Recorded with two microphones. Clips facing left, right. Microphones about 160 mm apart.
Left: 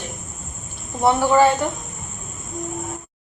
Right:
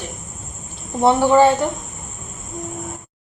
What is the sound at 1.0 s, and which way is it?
Speech, 25° right (ahead or behind).